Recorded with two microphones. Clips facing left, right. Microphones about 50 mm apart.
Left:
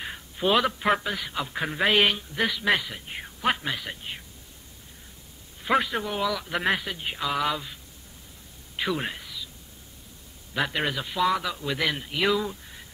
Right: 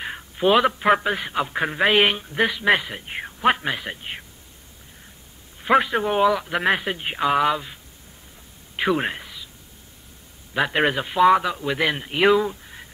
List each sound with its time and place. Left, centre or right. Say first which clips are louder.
0.0 s a sound: right 6 dB; centre
1.0 s a man's voice: right 7 dB; right
5.6 s a man's voice: right 6 dB; centre
6.0 s speech: right 9 dB; right
6.4 s speech: right 4 dB; centre
6.8 s a man's voice: right 7 dB; right
7.4 s a man's voice: right 6 dB; centre
10.7 s a man's voice: right 7 dB; right